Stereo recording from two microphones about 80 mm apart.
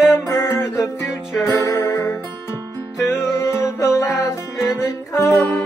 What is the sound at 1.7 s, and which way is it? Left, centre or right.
Music, left.